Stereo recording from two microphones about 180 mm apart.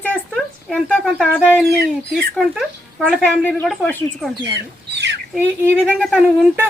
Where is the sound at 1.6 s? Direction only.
60° right (ahead or behind).